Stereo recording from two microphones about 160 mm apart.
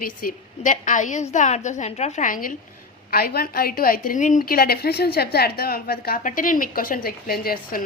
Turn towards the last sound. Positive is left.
turn(degrees=70)  # may be behind; listen again after turning